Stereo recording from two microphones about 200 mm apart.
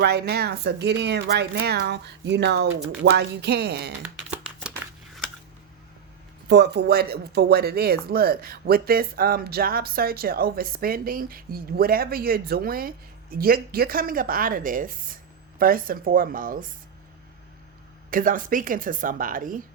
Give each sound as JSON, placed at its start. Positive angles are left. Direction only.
{"t": 0.0, "sound": "speech", "side_deg": -55}
{"t": 4.3, "sound": "a sound", "side_deg": -5}
{"t": 4.7, "sound": "crumpling", "side_deg": 5}
{"t": 6.5, "sound": "speech", "side_deg": -55}
{"t": 18.1, "sound": "speech", "side_deg": -45}